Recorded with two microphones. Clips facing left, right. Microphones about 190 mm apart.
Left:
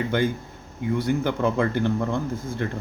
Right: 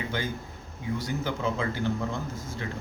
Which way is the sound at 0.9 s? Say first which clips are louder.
Left 8 dB; 55° left (ahead or behind).